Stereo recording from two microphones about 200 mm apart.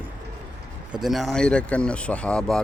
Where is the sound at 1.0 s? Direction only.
Centre (ahead or behind).